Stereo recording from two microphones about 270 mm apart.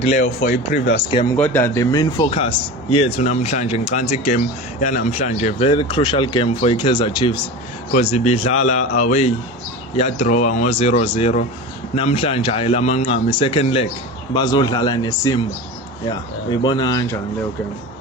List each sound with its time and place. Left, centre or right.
0.2 s speech: left
1.1 s a man's voice: centre